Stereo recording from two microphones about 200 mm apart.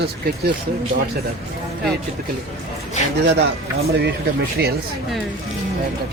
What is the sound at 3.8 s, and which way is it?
Speech, 55° right (ahead or behind).